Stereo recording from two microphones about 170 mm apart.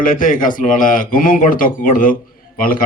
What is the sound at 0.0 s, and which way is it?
Speech, 55° left (ahead or behind).